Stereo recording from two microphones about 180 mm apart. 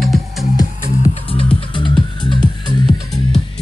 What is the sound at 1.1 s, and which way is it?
Music, 30° left (ahead or behind).